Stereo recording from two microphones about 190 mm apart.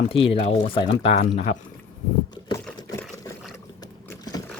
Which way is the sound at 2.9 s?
15° left (ahead or behind).